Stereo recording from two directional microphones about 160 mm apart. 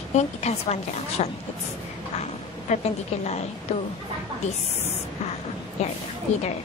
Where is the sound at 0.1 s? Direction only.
45° left (ahead or behind).